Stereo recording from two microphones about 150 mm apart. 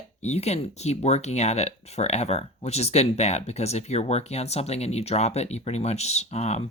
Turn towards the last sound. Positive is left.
turn(degrees=45)  # may be behind; listen again after turning